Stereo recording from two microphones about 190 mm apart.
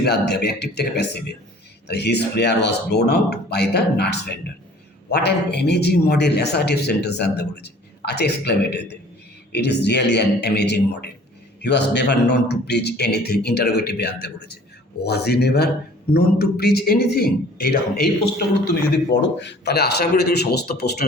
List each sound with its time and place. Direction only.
0.0 s a man's voice: 60° left (ahead or behind)
19.4 s a man's voice: 65° left (ahead or behind)